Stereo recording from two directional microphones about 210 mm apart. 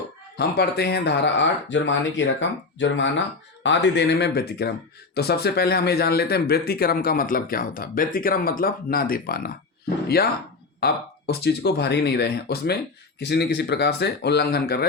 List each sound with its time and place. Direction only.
0.3 s speech: 50° left (ahead or behind)